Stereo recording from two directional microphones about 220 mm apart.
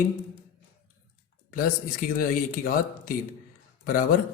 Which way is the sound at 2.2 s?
40° left (ahead or behind).